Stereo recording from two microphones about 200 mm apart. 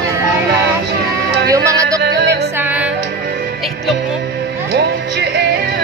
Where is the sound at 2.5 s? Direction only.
10° right (ahead or behind).